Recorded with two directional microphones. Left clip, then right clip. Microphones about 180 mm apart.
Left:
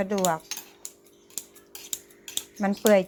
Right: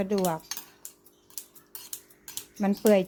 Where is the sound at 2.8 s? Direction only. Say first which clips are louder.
Left 2 dB; 20° right (ahead or behind).